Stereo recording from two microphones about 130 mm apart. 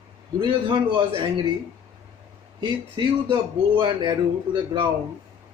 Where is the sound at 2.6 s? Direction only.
40° right (ahead or behind).